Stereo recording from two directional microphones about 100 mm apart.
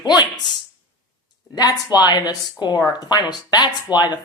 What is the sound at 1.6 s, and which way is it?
Speech, 40° left (ahead or behind).